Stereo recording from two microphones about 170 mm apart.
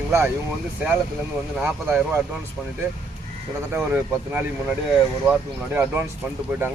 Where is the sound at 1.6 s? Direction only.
10° right (ahead or behind).